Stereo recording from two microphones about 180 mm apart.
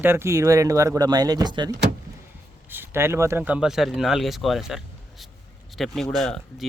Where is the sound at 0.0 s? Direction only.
15° right (ahead or behind).